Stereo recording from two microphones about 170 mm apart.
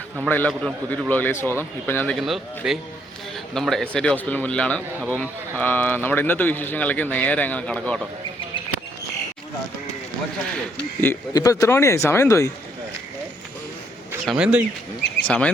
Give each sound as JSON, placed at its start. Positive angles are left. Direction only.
{"t": 0.3, "sound": "speech", "side_deg": 10}
{"t": 2.1, "sound": "speech", "side_deg": 0}
{"t": 11.0, "sound": "speech", "side_deg": 15}
{"t": 14.3, "sound": "speech", "side_deg": -5}
{"t": 15.2, "sound": "speech", "side_deg": 5}